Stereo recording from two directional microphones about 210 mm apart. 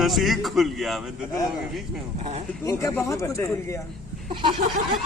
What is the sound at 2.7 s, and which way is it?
Speech, 15° left (ahead or behind).